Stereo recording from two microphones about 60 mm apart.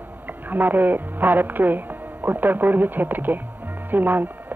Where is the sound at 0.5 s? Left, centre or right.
Right.